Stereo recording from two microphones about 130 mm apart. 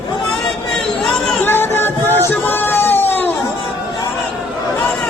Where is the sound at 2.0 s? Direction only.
20° right (ahead or behind).